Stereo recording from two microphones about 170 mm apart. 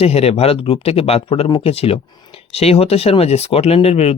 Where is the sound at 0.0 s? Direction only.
35° left (ahead or behind).